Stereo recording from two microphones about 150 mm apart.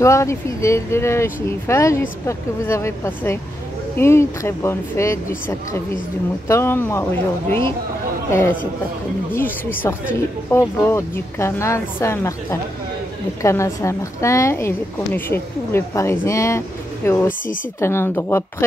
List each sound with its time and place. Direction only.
0.0 s a woman's voice: 20° left (ahead or behind)
8.3 s a woman's voice: 20° left (ahead or behind)